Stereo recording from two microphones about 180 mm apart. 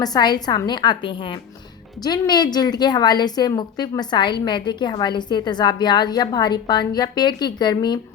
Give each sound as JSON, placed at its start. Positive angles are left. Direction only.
{"t": 0.0, "sound": "a woman's voice", "side_deg": 20}